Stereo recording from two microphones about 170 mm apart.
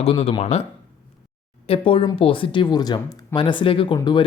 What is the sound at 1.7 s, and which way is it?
Speech, 30° left (ahead or behind).